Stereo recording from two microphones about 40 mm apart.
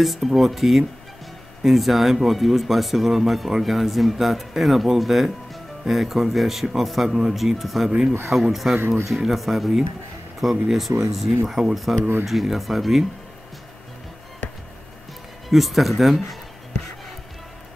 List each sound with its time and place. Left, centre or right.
0.0 s speech: centre
8.7 s speech: right
9.1 s speech: centre
15.5 s speech: centre
16.2 s a sound: centre